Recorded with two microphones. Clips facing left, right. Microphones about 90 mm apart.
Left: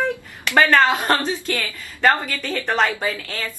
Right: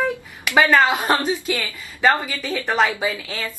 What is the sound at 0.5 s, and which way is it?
Speech, 10° right (ahead or behind).